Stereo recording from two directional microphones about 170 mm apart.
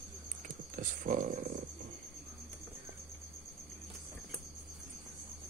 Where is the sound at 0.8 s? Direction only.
50° right (ahead or behind).